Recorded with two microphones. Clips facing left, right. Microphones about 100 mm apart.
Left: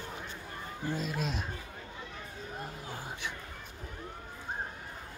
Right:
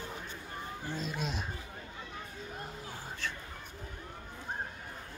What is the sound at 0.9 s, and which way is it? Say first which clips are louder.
Speech: left 3 dB; centre (ahead or behind).